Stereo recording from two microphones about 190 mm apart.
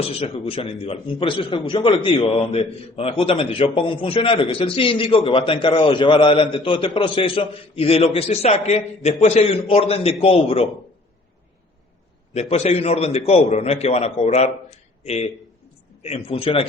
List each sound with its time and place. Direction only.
0.0 s a man's voice: 30° left (ahead or behind)
12.3 s a man's voice: 35° left (ahead or behind)